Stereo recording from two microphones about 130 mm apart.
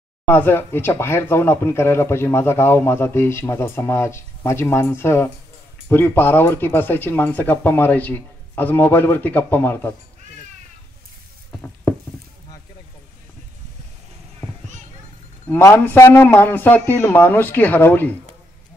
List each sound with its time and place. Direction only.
0.3 s speech: 15° left (ahead or behind)
15.4 s speech: 15° left (ahead or behind)